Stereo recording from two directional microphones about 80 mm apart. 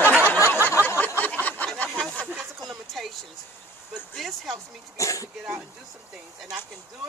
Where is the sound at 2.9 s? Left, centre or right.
Centre.